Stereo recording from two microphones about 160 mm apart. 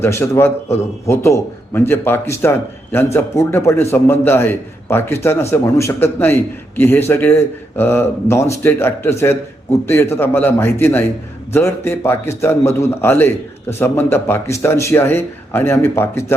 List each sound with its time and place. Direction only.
0.0 s a man's voice: 15° left (ahead or behind)